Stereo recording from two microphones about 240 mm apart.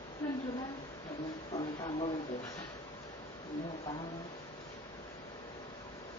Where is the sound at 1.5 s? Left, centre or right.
Left.